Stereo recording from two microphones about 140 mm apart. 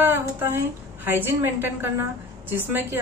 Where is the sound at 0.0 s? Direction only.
15° right (ahead or behind).